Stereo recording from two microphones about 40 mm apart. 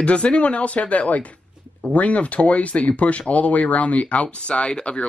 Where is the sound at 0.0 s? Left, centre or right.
Left.